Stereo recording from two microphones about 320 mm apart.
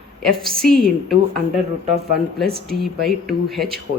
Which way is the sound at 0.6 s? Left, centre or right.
Centre.